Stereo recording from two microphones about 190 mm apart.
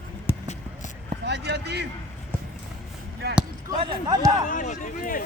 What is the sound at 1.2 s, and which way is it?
Speech, 60° right (ahead or behind).